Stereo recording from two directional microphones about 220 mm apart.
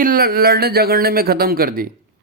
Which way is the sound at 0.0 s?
40° right (ahead or behind).